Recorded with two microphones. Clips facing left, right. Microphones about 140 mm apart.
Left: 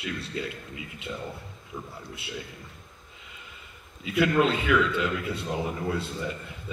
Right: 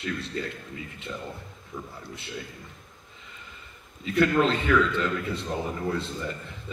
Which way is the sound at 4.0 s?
5° left (ahead or behind).